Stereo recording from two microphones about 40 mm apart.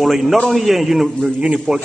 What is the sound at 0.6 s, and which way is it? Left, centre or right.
Speech, centre.